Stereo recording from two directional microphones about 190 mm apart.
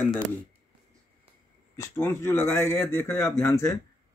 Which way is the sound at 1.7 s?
15° left (ahead or behind).